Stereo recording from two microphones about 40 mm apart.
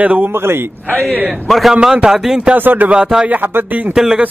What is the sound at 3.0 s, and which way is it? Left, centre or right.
Speech, centre.